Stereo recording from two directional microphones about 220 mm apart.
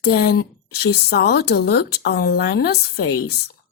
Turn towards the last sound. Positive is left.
turn(degrees=45)  # may be behind; listen again after turning